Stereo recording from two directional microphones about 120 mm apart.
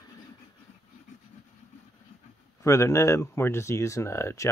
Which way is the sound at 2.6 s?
25° left (ahead or behind).